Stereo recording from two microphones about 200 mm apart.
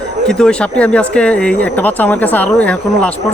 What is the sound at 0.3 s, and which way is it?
Speech, 5° left (ahead or behind).